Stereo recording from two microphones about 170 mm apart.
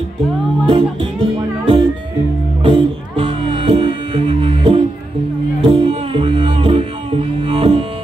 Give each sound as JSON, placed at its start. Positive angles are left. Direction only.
{"t": 0.7, "sound": "music", "side_deg": -30}